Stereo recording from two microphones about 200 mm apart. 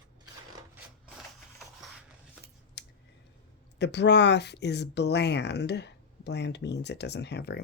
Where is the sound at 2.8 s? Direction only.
60° left (ahead or behind).